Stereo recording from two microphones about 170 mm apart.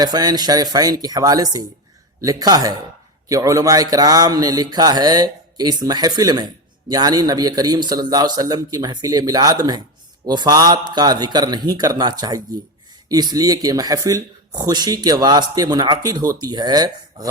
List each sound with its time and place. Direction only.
0.0 s speech: 25° right (ahead or behind)